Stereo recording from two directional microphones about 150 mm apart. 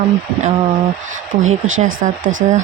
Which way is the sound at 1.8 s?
55° right (ahead or behind).